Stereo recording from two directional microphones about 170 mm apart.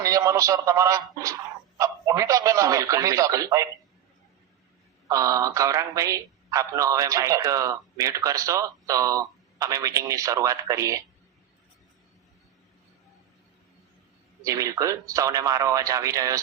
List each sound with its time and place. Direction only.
0.0 s speech: 20° right (ahead or behind)
5.0 s speech: 20° right (ahead or behind)
14.4 s speech: 20° right (ahead or behind)